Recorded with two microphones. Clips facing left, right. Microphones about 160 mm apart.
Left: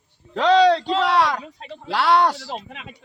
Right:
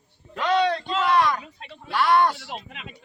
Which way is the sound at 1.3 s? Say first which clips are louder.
Left 3 dB; 35° left (ahead or behind).